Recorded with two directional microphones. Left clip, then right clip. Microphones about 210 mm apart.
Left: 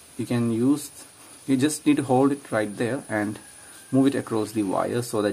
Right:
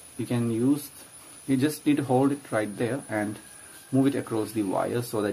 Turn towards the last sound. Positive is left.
turn(degrees=20)  # may be behind; listen again after turning